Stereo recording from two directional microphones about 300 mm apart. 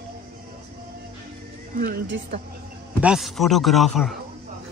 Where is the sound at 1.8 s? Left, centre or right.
Right.